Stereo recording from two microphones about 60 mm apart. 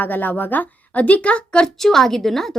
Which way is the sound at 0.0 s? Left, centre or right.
Left.